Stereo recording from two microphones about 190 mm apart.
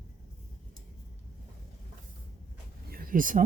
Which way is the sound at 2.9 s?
50° right (ahead or behind).